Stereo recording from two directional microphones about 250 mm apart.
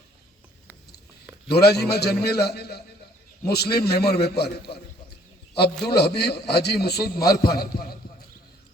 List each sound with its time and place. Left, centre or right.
1.5 s a man's voice: left
5.8 s a man's voice: left